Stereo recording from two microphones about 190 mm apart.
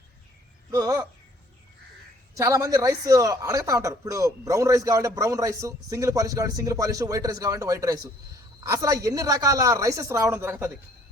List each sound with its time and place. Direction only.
0.7 s speech: 20° right (ahead or behind)
2.3 s speech: 15° right (ahead or behind)